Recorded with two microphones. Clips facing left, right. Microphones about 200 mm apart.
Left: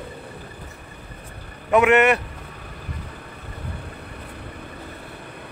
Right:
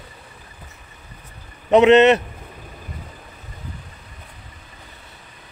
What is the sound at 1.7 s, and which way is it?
Speech, 20° right (ahead or behind).